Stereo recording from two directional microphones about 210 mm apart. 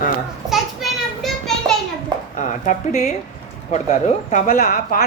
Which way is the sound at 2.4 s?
35° left (ahead or behind).